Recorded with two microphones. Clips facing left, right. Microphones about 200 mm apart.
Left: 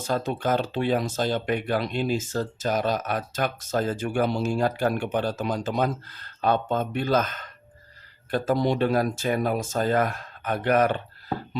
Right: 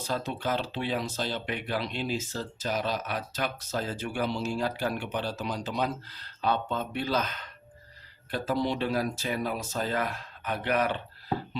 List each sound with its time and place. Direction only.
0.0 s speech: 50° left (ahead or behind)